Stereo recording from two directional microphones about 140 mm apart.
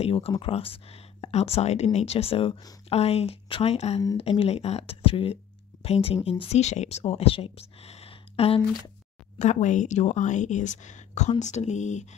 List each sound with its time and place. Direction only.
0.0 s speech: 45° left (ahead or behind)
9.4 s a woman's voice: 60° left (ahead or behind)